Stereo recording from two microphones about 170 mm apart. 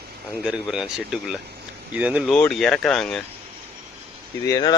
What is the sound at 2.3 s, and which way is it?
Speech, 5° left (ahead or behind).